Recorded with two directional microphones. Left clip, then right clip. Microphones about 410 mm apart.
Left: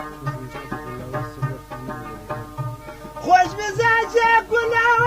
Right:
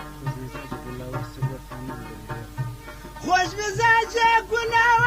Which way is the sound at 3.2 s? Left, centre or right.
Right.